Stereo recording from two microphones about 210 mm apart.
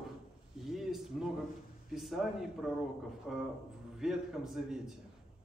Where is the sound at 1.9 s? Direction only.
Centre (ahead or behind).